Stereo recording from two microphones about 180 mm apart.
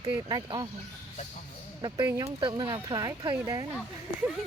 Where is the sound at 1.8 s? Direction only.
20° right (ahead or behind).